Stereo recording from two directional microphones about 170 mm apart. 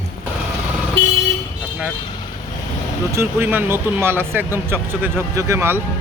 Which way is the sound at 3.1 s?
15° right (ahead or behind).